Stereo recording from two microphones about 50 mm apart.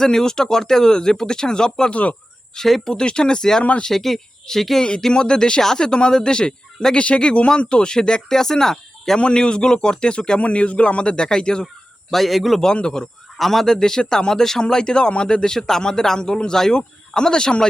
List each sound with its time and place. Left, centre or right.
0.0 s speech: centre
1.9 s speech: left
2.6 s speech: centre
2.9 s speech: centre
3.6 s speech: left
3.8 s speech: centre
12.1 s speech: centre
12.6 s speech: centre
13.3 s speech: centre